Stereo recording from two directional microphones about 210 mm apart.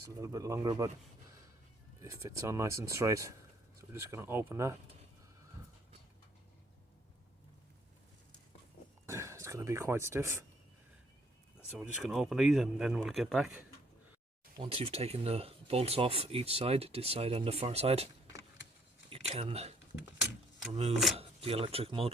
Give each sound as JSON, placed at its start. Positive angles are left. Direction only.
{"t": 0.2, "sound": "speech", "side_deg": -15}
{"t": 2.0, "sound": "speech", "side_deg": -15}
{"t": 9.0, "sound": "speech", "side_deg": -15}
{"t": 11.7, "sound": "speech", "side_deg": -5}
{"t": 14.6, "sound": "speech", "side_deg": -25}
{"t": 19.1, "sound": "speech", "side_deg": -30}
{"t": 21.2, "sound": "speech", "side_deg": -30}